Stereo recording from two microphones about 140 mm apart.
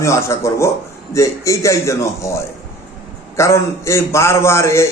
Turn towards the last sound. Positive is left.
turn(degrees=20)  # may be behind; listen again after turning